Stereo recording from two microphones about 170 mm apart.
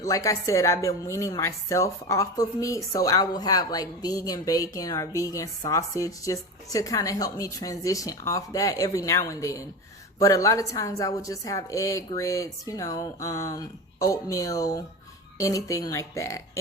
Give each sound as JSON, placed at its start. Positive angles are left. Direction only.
{"t": 0.0, "sound": "speech", "side_deg": 20}